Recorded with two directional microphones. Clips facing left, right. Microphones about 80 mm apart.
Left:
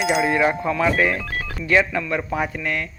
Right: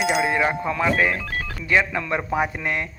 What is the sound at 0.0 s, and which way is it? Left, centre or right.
Speech, centre.